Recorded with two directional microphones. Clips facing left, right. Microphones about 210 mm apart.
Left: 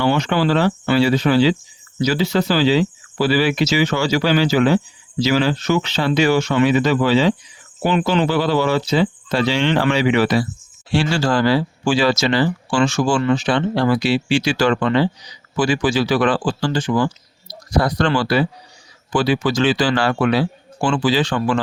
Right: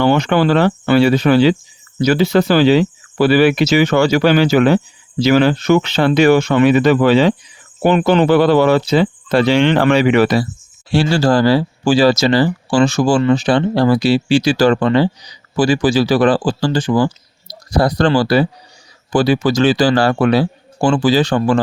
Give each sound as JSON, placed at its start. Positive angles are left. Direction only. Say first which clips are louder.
{"t": 0.0, "sound": "speech", "louder": "right 4 dB", "side_deg": -55}
{"t": 10.9, "sound": "speech", "louder": "right 5 dB", "side_deg": -35}